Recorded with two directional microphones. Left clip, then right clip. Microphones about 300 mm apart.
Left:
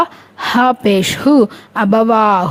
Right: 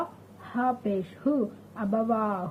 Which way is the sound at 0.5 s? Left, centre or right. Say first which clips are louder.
Left 16 dB; left.